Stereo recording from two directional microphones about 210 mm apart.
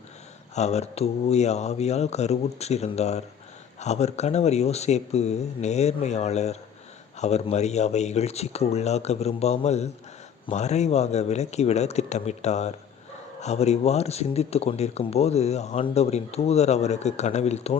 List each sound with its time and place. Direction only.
0.5 s speech: 30° left (ahead or behind)